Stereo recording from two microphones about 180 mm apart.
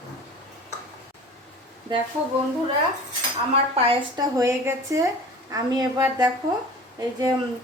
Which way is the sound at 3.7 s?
30° right (ahead or behind).